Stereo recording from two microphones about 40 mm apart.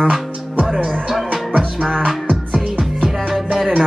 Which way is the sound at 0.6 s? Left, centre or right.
Right.